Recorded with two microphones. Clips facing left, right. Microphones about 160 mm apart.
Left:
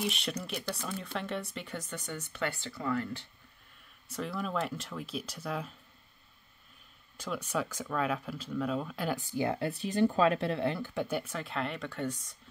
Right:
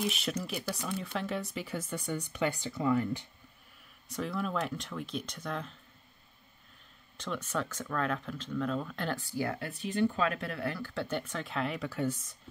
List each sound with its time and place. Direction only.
0.0 s speech: centre (ahead or behind)
4.1 s speech: centre (ahead or behind)
7.2 s speech: 10° left (ahead or behind)
9.7 s speech: 35° left (ahead or behind); by 12.2 s 5° right (ahead or behind)